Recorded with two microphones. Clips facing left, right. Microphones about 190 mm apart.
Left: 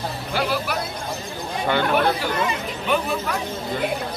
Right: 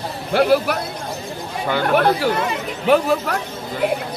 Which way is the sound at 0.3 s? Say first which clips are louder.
Right 9 dB; 55° right (ahead or behind).